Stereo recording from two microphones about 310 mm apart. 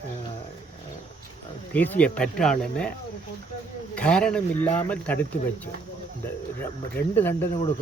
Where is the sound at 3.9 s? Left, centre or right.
Centre.